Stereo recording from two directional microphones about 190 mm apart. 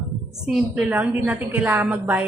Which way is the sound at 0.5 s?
5° right (ahead or behind).